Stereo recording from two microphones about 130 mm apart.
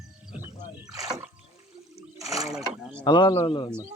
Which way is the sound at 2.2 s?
25° right (ahead or behind).